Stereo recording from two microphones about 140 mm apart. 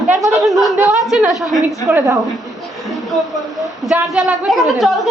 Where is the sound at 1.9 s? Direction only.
15° right (ahead or behind).